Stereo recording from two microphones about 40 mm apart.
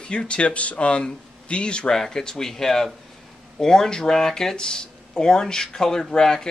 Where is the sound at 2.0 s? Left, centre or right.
Centre.